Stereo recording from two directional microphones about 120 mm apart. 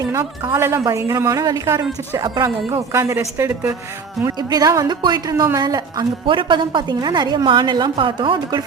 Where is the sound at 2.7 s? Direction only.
25° right (ahead or behind).